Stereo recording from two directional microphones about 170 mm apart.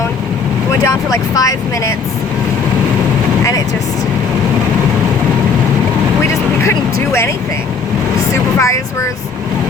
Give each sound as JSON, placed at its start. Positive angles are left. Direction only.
{"t": 0.9, "sound": "speech", "side_deg": 20}
{"t": 6.6, "sound": "music", "side_deg": 15}
{"t": 8.3, "sound": "vehicle", "side_deg": 15}